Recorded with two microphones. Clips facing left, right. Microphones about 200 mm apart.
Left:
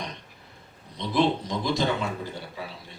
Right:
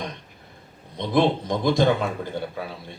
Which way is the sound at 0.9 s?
55° right (ahead or behind).